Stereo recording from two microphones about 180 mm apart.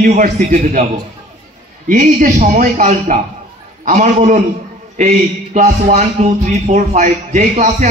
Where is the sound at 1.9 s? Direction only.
45° right (ahead or behind).